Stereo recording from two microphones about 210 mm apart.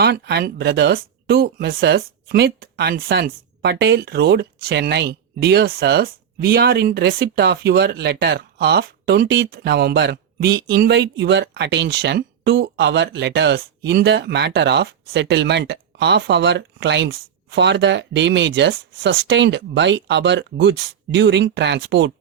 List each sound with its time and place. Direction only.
0.0 s speech: 50° right (ahead or behind)